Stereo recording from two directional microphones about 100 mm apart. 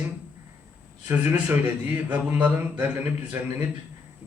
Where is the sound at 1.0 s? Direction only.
20° right (ahead or behind).